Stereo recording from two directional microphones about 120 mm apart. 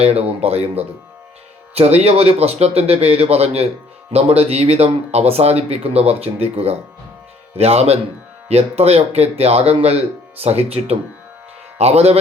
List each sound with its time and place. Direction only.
0.0 s speech: 55° right (ahead or behind)